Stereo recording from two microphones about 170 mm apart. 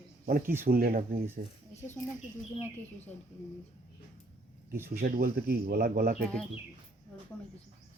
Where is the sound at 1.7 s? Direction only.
40° left (ahead or behind).